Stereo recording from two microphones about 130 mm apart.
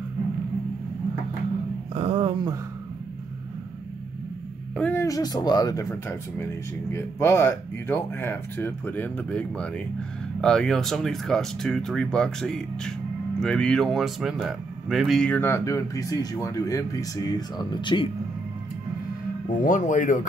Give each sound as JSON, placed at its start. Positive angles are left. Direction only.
{"t": 2.0, "sound": "speech", "side_deg": -45}
{"t": 4.9, "sound": "speech", "side_deg": 25}
{"t": 15.2, "sound": "speech", "side_deg": 15}
{"t": 19.6, "sound": "speech", "side_deg": 75}